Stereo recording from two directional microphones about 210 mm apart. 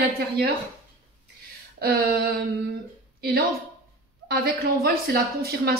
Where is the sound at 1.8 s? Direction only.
45° right (ahead or behind).